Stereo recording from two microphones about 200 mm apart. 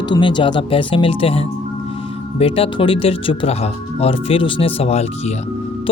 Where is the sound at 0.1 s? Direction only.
25° left (ahead or behind).